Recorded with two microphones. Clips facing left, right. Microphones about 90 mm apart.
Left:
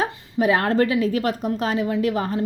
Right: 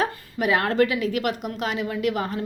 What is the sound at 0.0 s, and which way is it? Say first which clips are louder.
Speech: left 3 dB; 30° left (ahead or behind).